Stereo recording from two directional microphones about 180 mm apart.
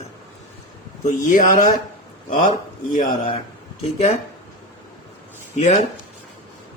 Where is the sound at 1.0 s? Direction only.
45° left (ahead or behind).